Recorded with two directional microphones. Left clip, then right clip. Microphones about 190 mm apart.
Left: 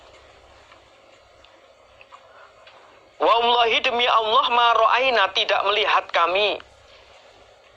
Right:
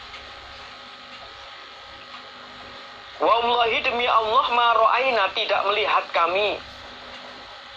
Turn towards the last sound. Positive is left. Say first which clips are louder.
# left 1 dB
turn(degrees=35)  # may be behind; listen again after turning